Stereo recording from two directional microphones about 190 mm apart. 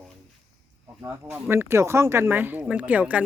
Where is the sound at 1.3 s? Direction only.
10° right (ahead or behind).